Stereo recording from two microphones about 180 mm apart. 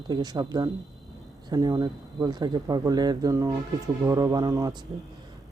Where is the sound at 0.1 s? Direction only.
25° right (ahead or behind).